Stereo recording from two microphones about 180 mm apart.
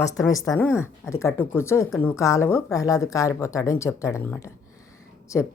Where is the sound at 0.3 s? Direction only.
20° left (ahead or behind).